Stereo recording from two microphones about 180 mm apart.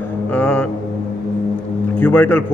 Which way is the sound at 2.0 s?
10° left (ahead or behind).